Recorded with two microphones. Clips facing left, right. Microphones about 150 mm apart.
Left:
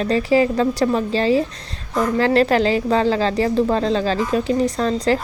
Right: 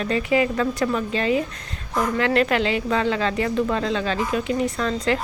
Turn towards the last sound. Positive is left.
turn(degrees=35)  # may be behind; listen again after turning